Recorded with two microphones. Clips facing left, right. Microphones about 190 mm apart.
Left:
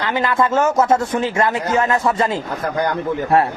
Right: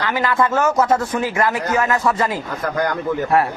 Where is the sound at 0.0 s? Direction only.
20° left (ahead or behind).